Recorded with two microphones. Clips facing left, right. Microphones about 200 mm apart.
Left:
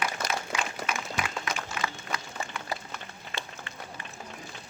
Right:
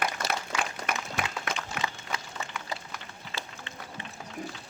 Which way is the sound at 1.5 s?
60° right (ahead or behind).